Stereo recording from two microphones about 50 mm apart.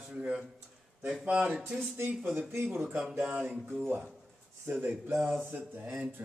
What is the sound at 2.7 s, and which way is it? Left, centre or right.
Speech, right.